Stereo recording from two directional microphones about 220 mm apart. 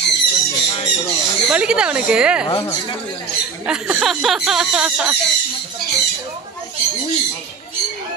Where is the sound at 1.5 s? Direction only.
5° right (ahead or behind).